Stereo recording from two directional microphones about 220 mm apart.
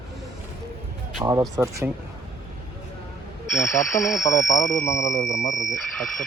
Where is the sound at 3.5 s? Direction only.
5° left (ahead or behind).